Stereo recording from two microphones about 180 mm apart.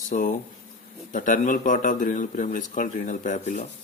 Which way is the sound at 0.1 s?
45° left (ahead or behind).